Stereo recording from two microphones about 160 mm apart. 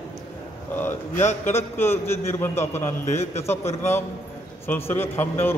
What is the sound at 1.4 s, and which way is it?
A man's voice, 15° left (ahead or behind).